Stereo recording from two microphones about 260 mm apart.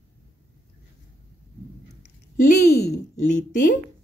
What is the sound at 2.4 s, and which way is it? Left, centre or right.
Speech, left.